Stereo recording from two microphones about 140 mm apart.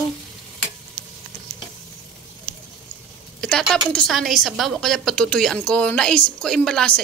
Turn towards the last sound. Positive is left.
turn(degrees=5)  # may be behind; listen again after turning